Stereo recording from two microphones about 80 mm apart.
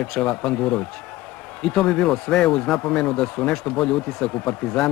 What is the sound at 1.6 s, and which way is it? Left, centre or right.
A man's voice, centre.